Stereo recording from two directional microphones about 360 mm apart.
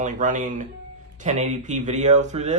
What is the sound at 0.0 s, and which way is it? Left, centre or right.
Speech, right.